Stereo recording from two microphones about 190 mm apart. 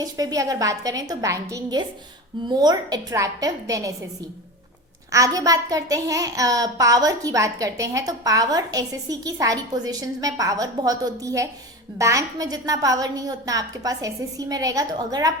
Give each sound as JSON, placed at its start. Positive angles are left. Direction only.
{"t": 0.0, "sound": "a child's voice", "side_deg": -20}
{"t": 5.1, "sound": "a child's voice", "side_deg": -15}